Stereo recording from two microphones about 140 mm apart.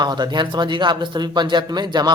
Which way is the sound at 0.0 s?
30° right (ahead or behind).